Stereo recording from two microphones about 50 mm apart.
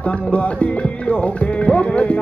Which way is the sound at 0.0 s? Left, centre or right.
Left.